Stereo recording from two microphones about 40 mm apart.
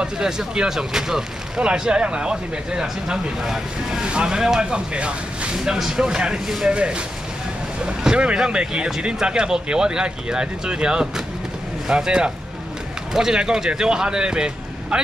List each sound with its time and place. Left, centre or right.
0.0 s speech: centre
1.6 s speech: right
4.0 s speech: right
5.6 s speech: centre
6.4 s speech: centre
6.7 s speech: right